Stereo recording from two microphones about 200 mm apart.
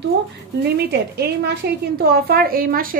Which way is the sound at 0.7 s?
55° right (ahead or behind).